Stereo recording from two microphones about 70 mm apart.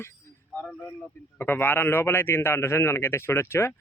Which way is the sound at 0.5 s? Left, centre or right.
Left.